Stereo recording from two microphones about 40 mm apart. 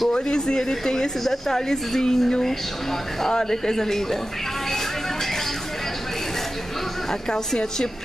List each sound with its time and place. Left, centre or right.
0.1 s speech: centre
7.1 s speech: centre